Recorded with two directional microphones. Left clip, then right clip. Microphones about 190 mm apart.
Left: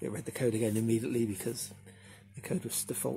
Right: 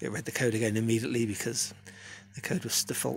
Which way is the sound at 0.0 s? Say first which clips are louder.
Right 3 dB; 10° right (ahead or behind).